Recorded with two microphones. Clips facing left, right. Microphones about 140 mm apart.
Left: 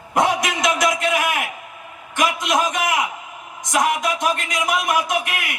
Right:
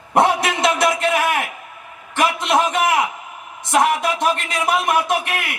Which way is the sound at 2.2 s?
30° right (ahead or behind).